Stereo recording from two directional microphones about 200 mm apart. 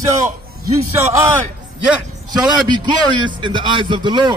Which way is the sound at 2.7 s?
20° right (ahead or behind).